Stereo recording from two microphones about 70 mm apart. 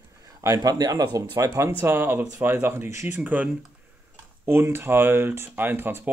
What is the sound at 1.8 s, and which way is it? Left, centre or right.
Speech, right.